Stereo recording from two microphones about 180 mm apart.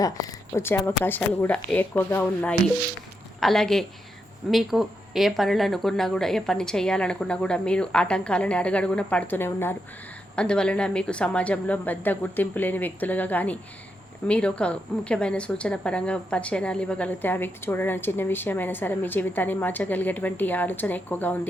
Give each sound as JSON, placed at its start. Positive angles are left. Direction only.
{"t": 0.0, "sound": "a woman's voice", "side_deg": 20}